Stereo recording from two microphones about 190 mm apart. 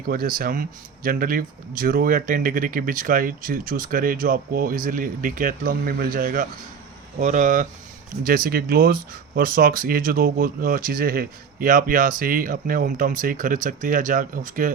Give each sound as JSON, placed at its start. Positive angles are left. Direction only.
{"t": 0.0, "sound": "speech", "side_deg": -50}